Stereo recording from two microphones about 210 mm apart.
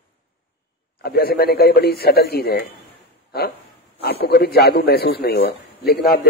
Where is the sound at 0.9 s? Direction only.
45° left (ahead or behind).